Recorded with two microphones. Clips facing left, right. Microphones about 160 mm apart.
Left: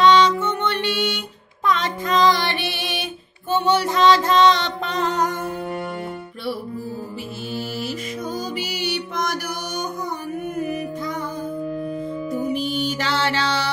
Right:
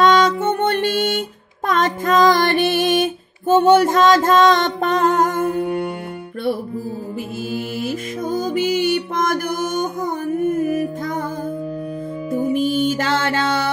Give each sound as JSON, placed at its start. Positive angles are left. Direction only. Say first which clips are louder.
{"t": 0.0, "sound": "music", "louder": "right 1 dB", "side_deg": -50}
{"t": 7.5, "sound": "music", "louder": "right 3 dB", "side_deg": -50}
{"t": 12.5, "sound": "music", "louder": "right 6 dB", "side_deg": -50}